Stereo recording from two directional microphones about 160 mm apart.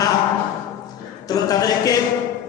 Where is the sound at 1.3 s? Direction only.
25° left (ahead or behind).